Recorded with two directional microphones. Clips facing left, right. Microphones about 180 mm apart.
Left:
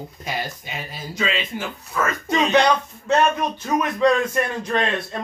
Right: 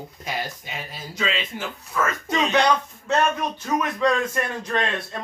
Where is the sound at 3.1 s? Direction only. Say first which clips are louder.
Left 3 dB; 20° left (ahead or behind).